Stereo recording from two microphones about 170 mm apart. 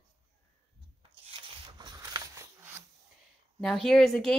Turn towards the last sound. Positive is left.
turn(degrees=5)  # may be behind; listen again after turning